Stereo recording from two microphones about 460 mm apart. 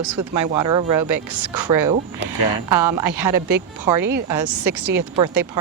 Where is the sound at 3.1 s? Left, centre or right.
Right.